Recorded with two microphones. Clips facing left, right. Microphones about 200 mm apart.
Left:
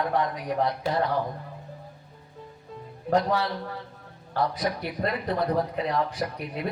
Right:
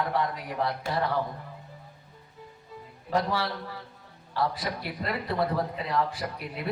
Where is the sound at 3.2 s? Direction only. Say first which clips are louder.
Left 2 dB; 20° left (ahead or behind).